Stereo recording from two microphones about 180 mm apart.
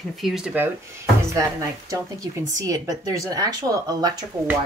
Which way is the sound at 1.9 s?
20° right (ahead or behind).